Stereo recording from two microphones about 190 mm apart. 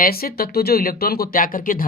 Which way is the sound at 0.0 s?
50° left (ahead or behind).